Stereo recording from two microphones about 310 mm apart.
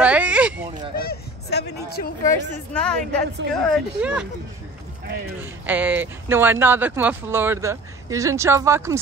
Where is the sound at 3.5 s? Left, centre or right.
Centre.